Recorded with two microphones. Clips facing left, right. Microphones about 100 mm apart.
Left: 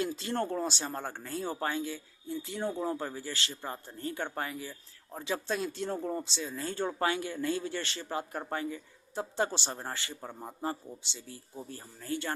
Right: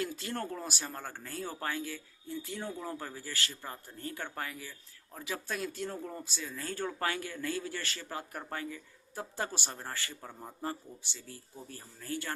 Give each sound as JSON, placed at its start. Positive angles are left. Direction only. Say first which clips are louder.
{"t": 0.0, "sound": "speech", "louder": "left 4 dB", "side_deg": 25}